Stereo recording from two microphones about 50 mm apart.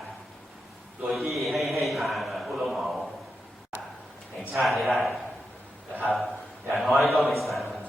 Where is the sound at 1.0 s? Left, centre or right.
Centre.